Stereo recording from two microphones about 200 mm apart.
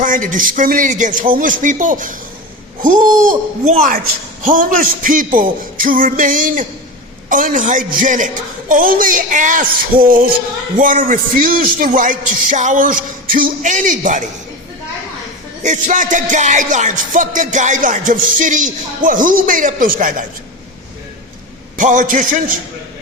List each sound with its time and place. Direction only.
0.0 s music: 40° right (ahead or behind)
2.8 s a man's voice: 40° right (ahead or behind)
7.3 s music: 40° right (ahead or behind)
8.7 s a man's voice: 45° right (ahead or behind)
12.5 s music: 40° right (ahead or behind)
15.6 s music: 40° right (ahead or behind)
21.8 s music: 40° right (ahead or behind)